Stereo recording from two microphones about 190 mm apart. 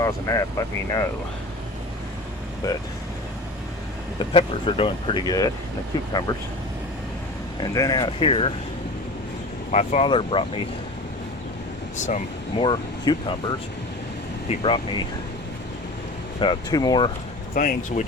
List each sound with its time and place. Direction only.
0.0 s speech: 20° left (ahead or behind)
2.6 s speech: 15° left (ahead or behind)
4.2 s speech: 25° left (ahead or behind)
7.6 s speech: 20° left (ahead or behind)
9.7 s speech: 35° left (ahead or behind)
11.9 s speech: 40° left (ahead or behind)
12.6 s speech: 25° left (ahead or behind)
14.4 s speech: 25° left (ahead or behind)
16.4 s speech: 25° left (ahead or behind)
17.5 s speech: 45° left (ahead or behind)